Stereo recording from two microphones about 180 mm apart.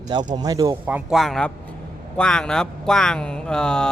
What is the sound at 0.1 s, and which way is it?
Speech, 25° right (ahead or behind).